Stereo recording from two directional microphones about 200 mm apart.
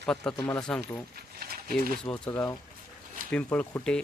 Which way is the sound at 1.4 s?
50° right (ahead or behind).